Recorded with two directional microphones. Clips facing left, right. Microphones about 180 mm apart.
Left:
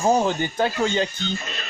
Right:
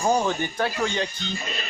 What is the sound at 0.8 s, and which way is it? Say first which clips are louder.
Speech: left 4 dB; 35° left (ahead or behind).